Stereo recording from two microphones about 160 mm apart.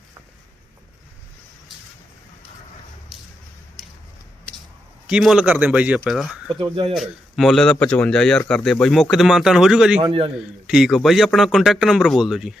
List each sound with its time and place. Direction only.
5.0 s a man's voice: 5° right (ahead or behind)
6.5 s speech: 35° right (ahead or behind)
6.9 s speech: centre (ahead or behind)
10.0 s speech: 35° right (ahead or behind)
10.7 s speech: centre (ahead or behind)